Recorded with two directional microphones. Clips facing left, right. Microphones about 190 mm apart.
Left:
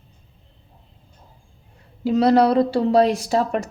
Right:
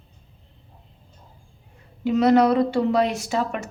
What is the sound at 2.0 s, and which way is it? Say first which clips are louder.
Speech: left 1 dB; 35° left (ahead or behind).